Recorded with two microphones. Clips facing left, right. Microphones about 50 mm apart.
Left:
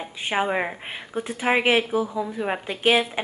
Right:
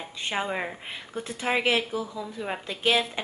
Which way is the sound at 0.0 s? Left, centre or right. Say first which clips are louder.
Left 5 dB; centre.